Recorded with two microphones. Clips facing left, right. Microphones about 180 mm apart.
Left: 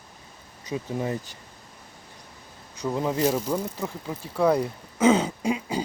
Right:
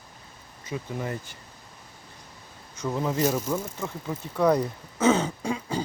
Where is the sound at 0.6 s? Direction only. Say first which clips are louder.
Left 3 dB; 20° left (ahead or behind).